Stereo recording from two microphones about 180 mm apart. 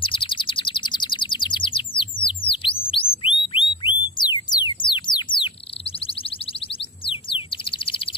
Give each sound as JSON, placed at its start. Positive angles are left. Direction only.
{"t": 0.0, "sound": "chirp", "side_deg": 30}
{"t": 7.1, "sound": "bird", "side_deg": 30}